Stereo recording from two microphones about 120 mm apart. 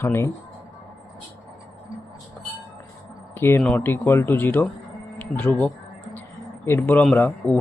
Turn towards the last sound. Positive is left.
turn(degrees=15)  # may be behind; listen again after turning